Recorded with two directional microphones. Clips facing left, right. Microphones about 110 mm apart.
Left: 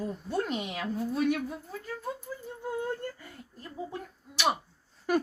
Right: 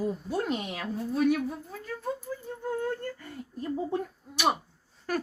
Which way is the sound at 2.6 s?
10° left (ahead or behind).